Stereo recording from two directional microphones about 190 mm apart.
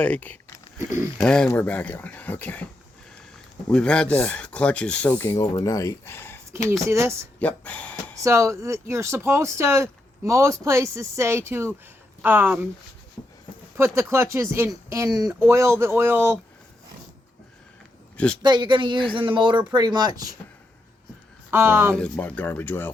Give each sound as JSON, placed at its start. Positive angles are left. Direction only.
{"t": 0.0, "sound": "speech", "side_deg": 10}
{"t": 0.8, "sound": "speech", "side_deg": -15}
{"t": 1.2, "sound": "speech", "side_deg": 5}
{"t": 3.7, "sound": "speech", "side_deg": 5}
{"t": 6.8, "sound": "speech", "side_deg": -15}
{"t": 7.3, "sound": "speech", "side_deg": 10}
{"t": 8.2, "sound": "speech", "side_deg": -15}
{"t": 13.7, "sound": "speech", "side_deg": -15}
{"t": 18.4, "sound": "speech", "side_deg": -25}
{"t": 21.5, "sound": "speech", "side_deg": -10}
{"t": 21.9, "sound": "speech", "side_deg": 5}